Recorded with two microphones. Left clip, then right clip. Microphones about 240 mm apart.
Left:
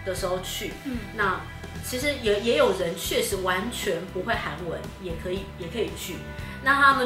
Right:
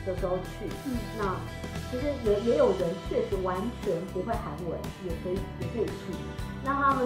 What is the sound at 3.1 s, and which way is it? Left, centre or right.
Speech, centre.